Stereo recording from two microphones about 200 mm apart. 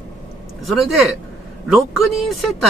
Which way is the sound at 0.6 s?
Centre (ahead or behind).